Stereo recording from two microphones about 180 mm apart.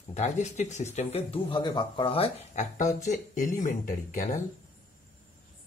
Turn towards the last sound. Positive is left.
turn(degrees=50)  # may be behind; listen again after turning